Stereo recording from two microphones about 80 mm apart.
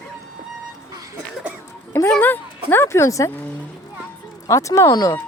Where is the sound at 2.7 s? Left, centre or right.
Left.